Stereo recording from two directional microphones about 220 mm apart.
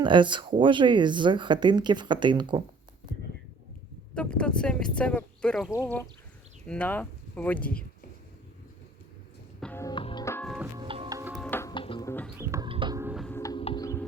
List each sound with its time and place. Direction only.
0.0 s speech: 20° right (ahead or behind)
4.1 s speech: 5° left (ahead or behind)
9.6 s music: 5° left (ahead or behind)
9.8 s music: 20° left (ahead or behind)
10.8 s music: 20° right (ahead or behind)
11.2 s music: centre (ahead or behind)
11.7 s music: 20° left (ahead or behind)
12.4 s music: 15° right (ahead or behind)
13.0 s music: 10° right (ahead or behind)
13.2 s music: 10° left (ahead or behind)